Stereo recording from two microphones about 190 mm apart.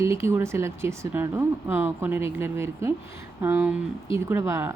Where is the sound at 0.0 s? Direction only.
15° right (ahead or behind).